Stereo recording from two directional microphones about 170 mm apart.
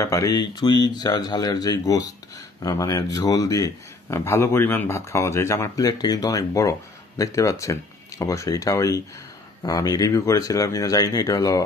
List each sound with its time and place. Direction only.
0.0 s speech: 20° left (ahead or behind)